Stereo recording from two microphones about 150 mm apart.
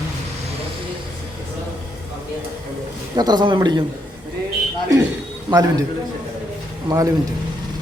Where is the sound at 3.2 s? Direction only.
30° right (ahead or behind).